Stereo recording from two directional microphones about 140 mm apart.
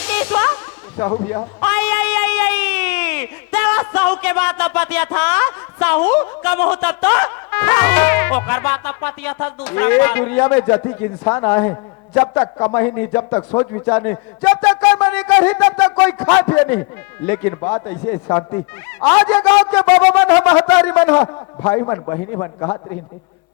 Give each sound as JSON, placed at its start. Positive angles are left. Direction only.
{"t": 0.0, "sound": "music", "side_deg": 10}
{"t": 1.2, "sound": "a man's voice", "side_deg": 20}